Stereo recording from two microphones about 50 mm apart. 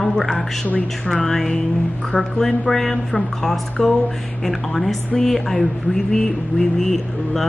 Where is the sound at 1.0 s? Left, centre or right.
Centre.